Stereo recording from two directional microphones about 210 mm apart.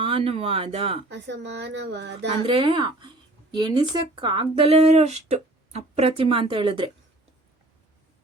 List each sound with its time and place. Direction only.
0.0 s speech: 25° right (ahead or behind)
1.1 s speech: 55° right (ahead or behind)
2.4 s speech: 25° right (ahead or behind)